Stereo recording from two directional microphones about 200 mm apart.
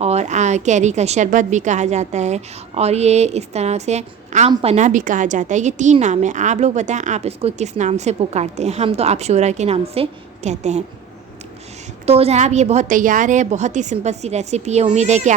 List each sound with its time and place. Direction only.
0.0 s a woman's voice: 35° right (ahead or behind)
12.0 s a woman's voice: 30° right (ahead or behind)